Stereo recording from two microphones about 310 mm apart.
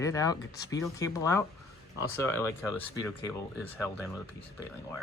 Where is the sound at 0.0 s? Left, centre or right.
Centre.